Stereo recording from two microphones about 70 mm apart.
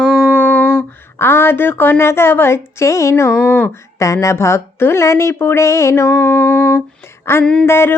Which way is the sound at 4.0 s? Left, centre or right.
Left.